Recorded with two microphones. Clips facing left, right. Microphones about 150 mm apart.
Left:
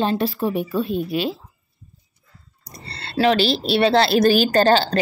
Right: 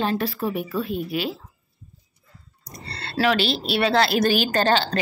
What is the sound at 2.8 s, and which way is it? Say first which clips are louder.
A woman's voice: left 4 dB; 30° left (ahead or behind).